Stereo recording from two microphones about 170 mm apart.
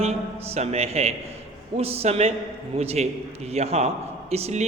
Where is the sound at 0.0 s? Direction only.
40° right (ahead or behind).